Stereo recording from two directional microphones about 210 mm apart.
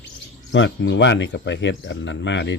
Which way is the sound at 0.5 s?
60° left (ahead or behind).